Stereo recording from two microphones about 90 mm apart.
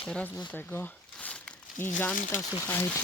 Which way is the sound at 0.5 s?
20° left (ahead or behind).